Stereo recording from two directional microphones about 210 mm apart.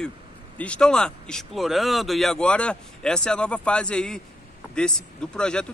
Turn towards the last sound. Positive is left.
turn(degrees=5)  # may be behind; listen again after turning